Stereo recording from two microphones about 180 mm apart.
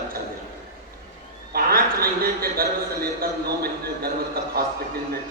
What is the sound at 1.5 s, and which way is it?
A man's voice, 55° right (ahead or behind).